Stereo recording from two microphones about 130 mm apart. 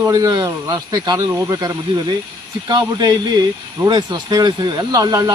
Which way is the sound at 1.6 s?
30° right (ahead or behind).